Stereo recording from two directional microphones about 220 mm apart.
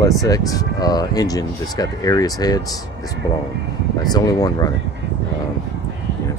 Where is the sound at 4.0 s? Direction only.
15° left (ahead or behind).